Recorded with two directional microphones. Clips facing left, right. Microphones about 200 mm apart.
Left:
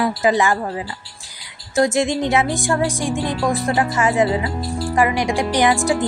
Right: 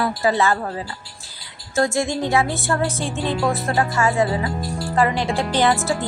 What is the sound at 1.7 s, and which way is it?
A woman's voice, 20° left (ahead or behind).